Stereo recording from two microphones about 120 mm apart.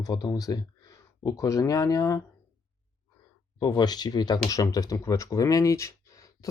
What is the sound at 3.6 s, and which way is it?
Speech, 35° left (ahead or behind).